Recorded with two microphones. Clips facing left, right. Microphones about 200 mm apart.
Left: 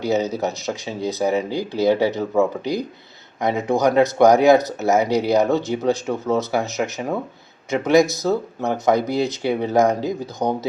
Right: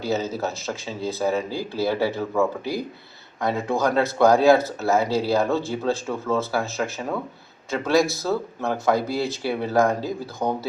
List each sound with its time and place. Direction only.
0.0 s speech: 20° left (ahead or behind)